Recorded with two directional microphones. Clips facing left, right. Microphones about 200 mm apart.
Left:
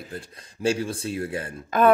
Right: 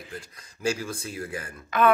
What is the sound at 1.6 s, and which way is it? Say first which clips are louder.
Speech: left 3 dB; 45° left (ahead or behind).